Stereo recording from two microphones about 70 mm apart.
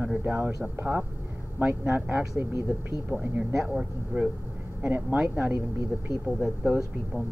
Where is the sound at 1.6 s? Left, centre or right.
Right; by 4.3 s centre.